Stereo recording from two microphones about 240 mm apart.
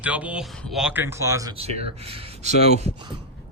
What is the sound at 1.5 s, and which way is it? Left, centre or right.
Speech, right.